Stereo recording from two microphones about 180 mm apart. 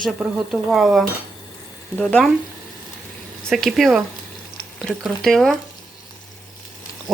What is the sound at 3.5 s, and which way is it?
Speech, centre (ahead or behind).